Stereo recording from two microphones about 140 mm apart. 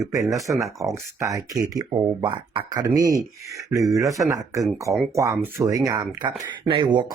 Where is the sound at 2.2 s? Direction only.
35° right (ahead or behind).